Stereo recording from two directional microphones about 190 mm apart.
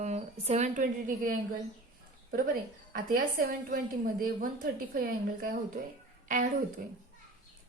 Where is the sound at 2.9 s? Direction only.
50° right (ahead or behind).